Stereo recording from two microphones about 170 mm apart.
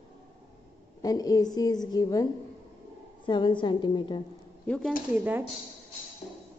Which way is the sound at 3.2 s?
25° left (ahead or behind).